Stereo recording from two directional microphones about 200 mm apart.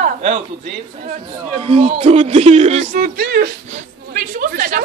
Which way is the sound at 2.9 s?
50° right (ahead or behind).